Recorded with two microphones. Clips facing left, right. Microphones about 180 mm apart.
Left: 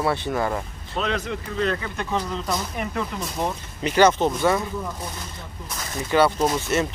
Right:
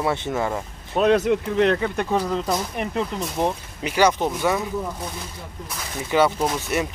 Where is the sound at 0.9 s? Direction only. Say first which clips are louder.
Right 9 dB; 60° right (ahead or behind).